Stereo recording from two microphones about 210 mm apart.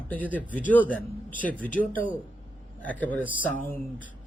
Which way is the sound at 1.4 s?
5° left (ahead or behind).